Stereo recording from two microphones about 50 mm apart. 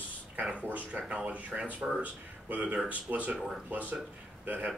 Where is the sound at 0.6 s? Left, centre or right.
Right.